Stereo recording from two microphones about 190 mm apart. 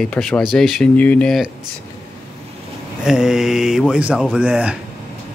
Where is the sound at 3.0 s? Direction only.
5° right (ahead or behind).